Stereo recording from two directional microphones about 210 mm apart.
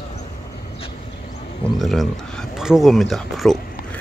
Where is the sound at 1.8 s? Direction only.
Centre (ahead or behind).